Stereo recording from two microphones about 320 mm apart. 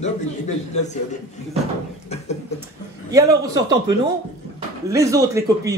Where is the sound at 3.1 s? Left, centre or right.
Centre.